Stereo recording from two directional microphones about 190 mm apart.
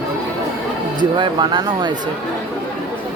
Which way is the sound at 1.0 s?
25° right (ahead or behind).